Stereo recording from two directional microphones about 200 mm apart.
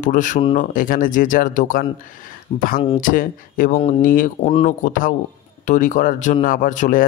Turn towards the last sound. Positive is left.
turn(degrees=40)  # may be behind; listen again after turning